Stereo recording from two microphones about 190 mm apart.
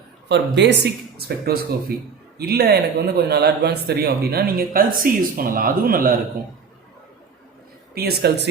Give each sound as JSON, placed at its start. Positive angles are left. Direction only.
{"t": 0.3, "sound": "speech", "side_deg": -65}
{"t": 7.9, "sound": "speech", "side_deg": -55}